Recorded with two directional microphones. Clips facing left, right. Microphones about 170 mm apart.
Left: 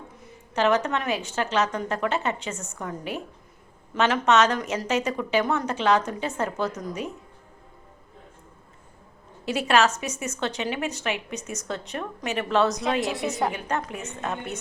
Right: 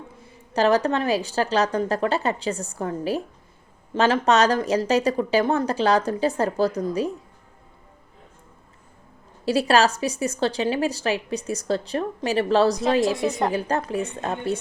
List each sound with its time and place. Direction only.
0.2 s a woman's voice: 35° right (ahead or behind)
9.5 s a woman's voice: 35° right (ahead or behind)